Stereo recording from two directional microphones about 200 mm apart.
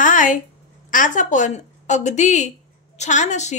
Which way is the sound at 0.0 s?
40° left (ahead or behind).